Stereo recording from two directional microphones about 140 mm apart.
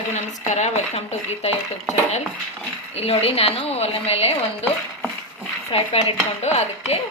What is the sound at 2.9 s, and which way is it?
A woman's voice, 45° left (ahead or behind).